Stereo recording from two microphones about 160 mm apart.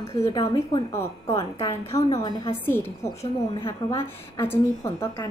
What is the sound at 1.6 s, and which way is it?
Speech, 20° left (ahead or behind).